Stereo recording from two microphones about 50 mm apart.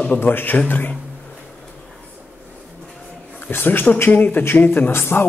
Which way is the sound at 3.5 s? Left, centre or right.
Left.